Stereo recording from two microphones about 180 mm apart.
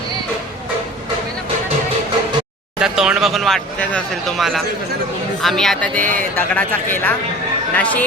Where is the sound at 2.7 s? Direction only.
5° right (ahead or behind).